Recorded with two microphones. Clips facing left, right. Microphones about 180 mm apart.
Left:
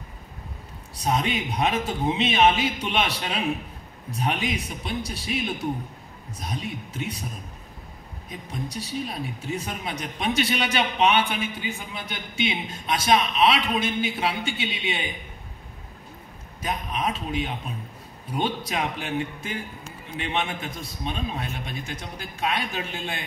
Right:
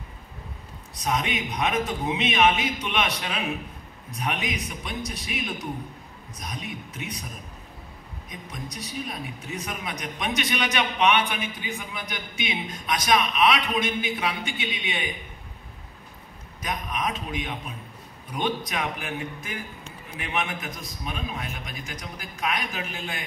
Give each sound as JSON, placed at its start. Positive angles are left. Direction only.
{"t": 1.0, "sound": "speech", "side_deg": 30}
{"t": 8.3, "sound": "speech", "side_deg": 30}
{"t": 16.6, "sound": "a man's voice", "side_deg": 30}